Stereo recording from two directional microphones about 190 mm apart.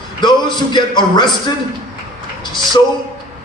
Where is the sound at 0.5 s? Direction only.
25° left (ahead or behind).